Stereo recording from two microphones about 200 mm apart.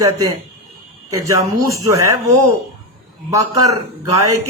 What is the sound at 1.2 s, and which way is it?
Speech, 15° right (ahead or behind).